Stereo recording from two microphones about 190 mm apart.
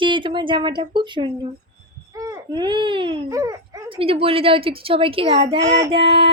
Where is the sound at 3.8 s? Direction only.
30° right (ahead or behind).